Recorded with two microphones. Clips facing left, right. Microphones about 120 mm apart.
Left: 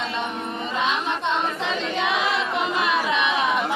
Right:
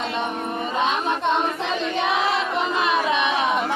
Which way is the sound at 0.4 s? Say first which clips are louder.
Right 2 dB; 45° right (ahead or behind).